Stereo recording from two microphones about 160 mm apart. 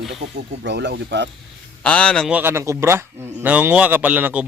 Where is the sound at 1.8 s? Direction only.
5° left (ahead or behind).